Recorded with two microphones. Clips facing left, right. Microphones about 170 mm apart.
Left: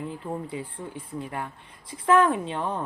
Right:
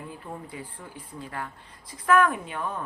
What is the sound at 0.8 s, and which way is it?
Speech, 20° left (ahead or behind).